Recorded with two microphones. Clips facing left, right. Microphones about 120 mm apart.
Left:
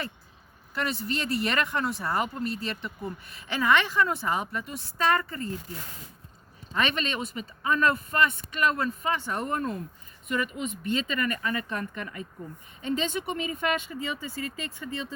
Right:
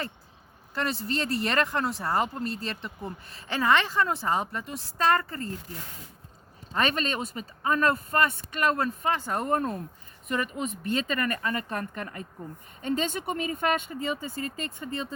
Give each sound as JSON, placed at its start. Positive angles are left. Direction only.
{"t": 0.7, "sound": "speech", "side_deg": -35}
{"t": 6.7, "sound": "speech", "side_deg": -40}